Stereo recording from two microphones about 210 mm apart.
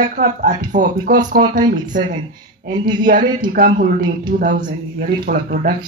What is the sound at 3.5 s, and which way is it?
Speech, 40° right (ahead or behind).